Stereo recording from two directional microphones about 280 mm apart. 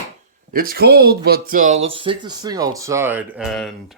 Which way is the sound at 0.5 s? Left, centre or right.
Right.